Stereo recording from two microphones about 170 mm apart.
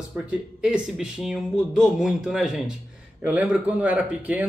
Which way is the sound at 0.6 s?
5° right (ahead or behind).